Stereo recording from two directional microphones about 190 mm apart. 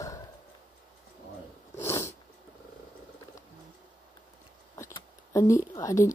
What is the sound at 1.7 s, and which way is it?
Dog, 15° left (ahead or behind).